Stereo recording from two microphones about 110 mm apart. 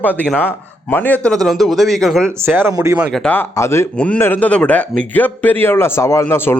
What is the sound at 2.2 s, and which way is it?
Speech, 20° right (ahead or behind).